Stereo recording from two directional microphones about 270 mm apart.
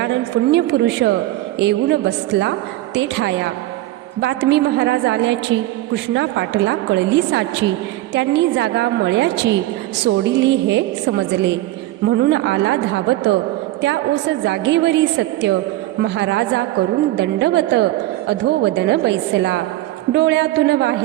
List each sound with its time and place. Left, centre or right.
0.0 s a woman's voice: right
14.4 s a woman's voice: right